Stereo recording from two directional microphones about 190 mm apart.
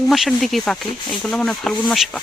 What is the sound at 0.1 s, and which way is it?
Speech, centre (ahead or behind).